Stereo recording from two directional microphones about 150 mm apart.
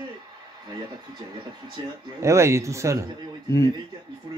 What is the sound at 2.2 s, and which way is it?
Speech, 20° right (ahead or behind).